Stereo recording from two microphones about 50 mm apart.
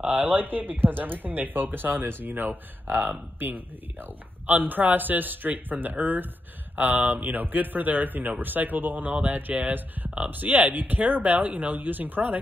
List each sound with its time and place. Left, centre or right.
0.1 s speech: right